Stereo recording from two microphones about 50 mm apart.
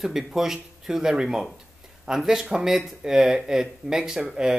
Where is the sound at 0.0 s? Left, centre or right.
Centre.